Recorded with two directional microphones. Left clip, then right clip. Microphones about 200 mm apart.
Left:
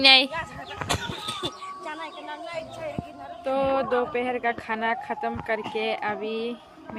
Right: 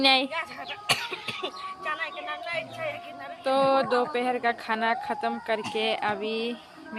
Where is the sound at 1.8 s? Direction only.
15° right (ahead or behind).